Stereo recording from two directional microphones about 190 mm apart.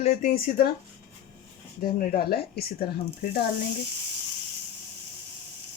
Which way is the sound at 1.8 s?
55° left (ahead or behind).